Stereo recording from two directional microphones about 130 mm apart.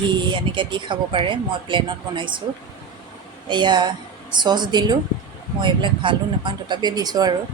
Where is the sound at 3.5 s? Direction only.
35° right (ahead or behind).